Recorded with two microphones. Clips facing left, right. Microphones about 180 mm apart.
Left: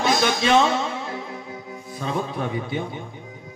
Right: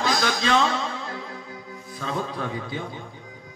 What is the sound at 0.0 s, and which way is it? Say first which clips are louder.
Music: left 3 dB; 25° left (ahead or behind).